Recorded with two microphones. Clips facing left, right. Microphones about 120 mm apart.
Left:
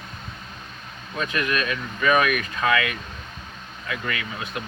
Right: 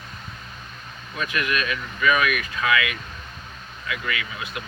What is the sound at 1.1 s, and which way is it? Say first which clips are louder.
Speech: left 1 dB; 30° left (ahead or behind).